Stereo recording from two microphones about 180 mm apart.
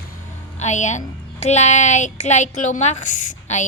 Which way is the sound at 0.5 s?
40° left (ahead or behind).